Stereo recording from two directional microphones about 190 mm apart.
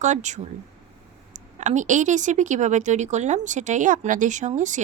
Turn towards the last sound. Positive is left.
turn(degrees=-40)  # may be behind; listen again after turning